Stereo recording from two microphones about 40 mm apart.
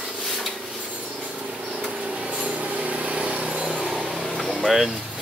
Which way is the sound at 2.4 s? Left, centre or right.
Right.